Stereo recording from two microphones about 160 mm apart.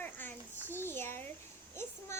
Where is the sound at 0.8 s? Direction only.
15° left (ahead or behind).